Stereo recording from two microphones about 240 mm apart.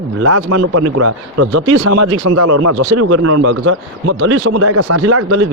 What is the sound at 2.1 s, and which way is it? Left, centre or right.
Speech, right.